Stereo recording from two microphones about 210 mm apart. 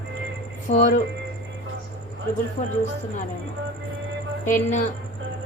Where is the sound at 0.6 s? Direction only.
35° left (ahead or behind).